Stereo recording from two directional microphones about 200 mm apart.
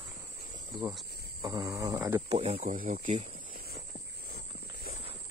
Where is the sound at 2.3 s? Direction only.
30° right (ahead or behind).